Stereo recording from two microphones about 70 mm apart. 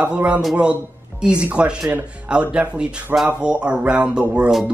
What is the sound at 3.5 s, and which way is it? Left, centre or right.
Speech, centre.